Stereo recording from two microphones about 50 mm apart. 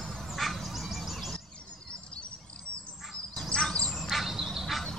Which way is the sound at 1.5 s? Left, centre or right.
Left.